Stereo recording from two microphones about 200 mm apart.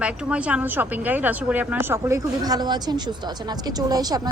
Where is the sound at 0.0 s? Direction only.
5° right (ahead or behind).